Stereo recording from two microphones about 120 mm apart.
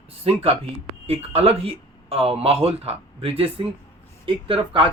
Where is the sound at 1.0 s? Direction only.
55° right (ahead or behind).